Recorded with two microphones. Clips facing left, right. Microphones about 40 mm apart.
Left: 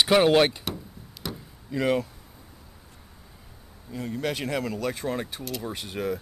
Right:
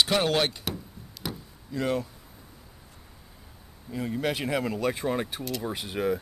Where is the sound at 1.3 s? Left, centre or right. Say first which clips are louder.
Even; centre.